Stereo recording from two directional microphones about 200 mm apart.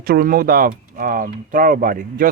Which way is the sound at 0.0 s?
50° right (ahead or behind).